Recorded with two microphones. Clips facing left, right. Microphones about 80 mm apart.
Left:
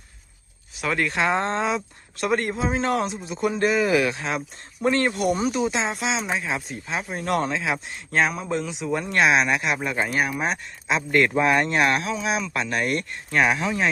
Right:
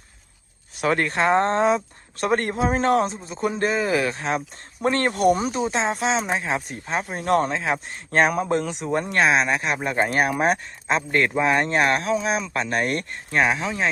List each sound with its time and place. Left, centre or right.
0.8 s speech: right
4.8 s speech: right
8.2 s speech: right
9.1 s speech: right
11.4 s speech: right
13.4 s speech: right